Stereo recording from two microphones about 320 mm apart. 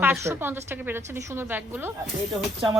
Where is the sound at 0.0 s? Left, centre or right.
Centre.